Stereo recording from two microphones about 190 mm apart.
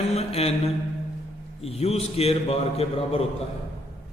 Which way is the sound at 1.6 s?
35° left (ahead or behind).